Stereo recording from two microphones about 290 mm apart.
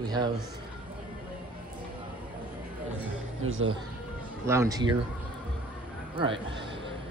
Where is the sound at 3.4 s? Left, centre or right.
Right.